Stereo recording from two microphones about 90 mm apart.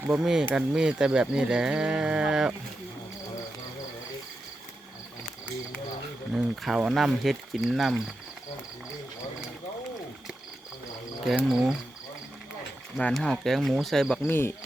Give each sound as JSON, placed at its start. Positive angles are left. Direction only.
{"t": 0.1, "sound": "speech", "side_deg": -5}
{"t": 6.3, "sound": "speech", "side_deg": -5}
{"t": 11.4, "sound": "speech", "side_deg": 0}
{"t": 13.0, "sound": "speech", "side_deg": 10}
{"t": 14.3, "sound": "speech", "side_deg": 25}